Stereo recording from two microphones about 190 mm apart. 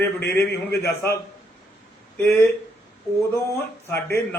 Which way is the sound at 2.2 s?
10° left (ahead or behind).